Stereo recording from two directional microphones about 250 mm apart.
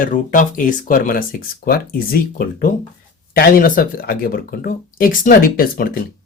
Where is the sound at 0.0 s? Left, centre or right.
Left.